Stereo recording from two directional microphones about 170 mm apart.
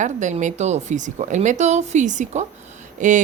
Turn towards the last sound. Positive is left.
turn(degrees=-50)  # may be behind; listen again after turning